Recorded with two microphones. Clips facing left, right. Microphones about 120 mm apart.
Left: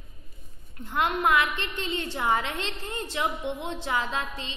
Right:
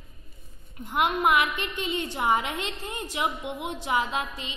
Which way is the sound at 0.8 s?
15° right (ahead or behind).